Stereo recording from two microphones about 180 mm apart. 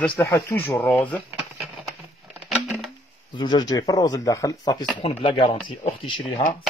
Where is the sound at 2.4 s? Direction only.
Centre (ahead or behind).